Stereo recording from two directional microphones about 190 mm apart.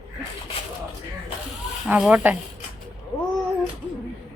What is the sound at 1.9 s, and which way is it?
Speech, 5° right (ahead or behind).